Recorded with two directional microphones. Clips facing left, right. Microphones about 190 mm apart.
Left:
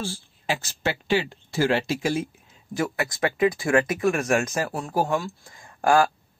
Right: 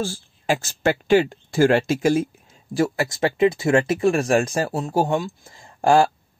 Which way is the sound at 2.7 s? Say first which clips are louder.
Right 5 dB; 30° right (ahead or behind).